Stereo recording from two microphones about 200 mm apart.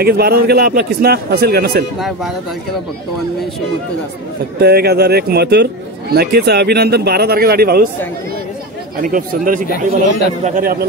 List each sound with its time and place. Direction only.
0.0 s a man's voice: 50° right (ahead or behind)
2.0 s speech: centre (ahead or behind)
4.6 s a man's voice: 50° right (ahead or behind)
9.0 s a man's voice: 45° right (ahead or behind)